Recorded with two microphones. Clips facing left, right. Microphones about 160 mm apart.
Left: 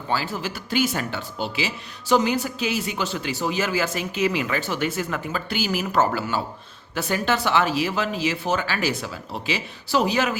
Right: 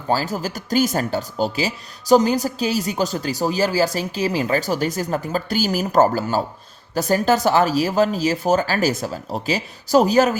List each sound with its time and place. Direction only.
0.1 s speech: 40° right (ahead or behind)